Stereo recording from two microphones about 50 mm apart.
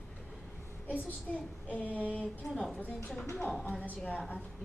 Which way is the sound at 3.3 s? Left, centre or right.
Centre.